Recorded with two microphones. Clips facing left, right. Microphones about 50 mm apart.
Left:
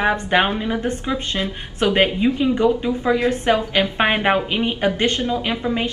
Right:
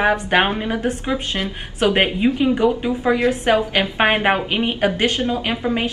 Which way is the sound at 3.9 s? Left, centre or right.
Centre.